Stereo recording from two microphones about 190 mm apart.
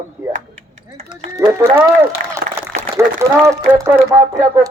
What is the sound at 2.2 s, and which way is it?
Applause, 45° right (ahead or behind).